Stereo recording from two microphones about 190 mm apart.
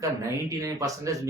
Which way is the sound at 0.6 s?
15° right (ahead or behind).